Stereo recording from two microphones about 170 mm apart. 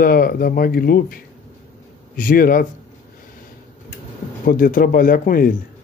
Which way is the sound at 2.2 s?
55° left (ahead or behind).